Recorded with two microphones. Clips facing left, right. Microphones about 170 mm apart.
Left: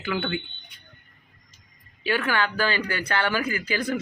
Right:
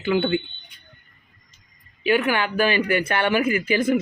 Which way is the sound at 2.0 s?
15° right (ahead or behind).